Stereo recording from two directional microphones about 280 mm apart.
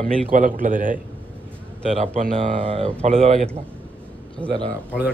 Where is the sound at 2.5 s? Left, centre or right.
Centre.